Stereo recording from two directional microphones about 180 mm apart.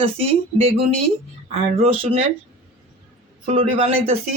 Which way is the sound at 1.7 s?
30° right (ahead or behind).